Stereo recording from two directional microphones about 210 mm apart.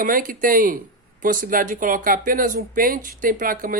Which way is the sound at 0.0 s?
40° right (ahead or behind).